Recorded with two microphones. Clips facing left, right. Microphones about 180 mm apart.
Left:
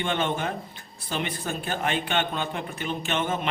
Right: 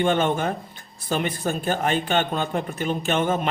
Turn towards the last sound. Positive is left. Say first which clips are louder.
# right 5 dB
turn(degrees=-45)  # may be behind; listen again after turning